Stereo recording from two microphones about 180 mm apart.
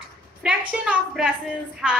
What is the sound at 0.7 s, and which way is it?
A woman's voice, 5° right (ahead or behind).